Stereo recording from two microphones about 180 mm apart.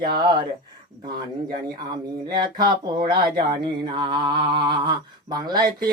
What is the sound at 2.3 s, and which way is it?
Speech, 25° right (ahead or behind).